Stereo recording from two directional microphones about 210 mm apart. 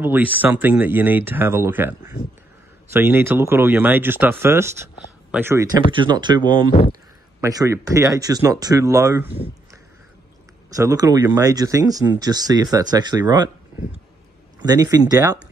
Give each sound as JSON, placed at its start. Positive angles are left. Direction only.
{"t": 0.0, "sound": "speech", "side_deg": -10}
{"t": 10.8, "sound": "speech", "side_deg": -15}
{"t": 14.6, "sound": "speech", "side_deg": -15}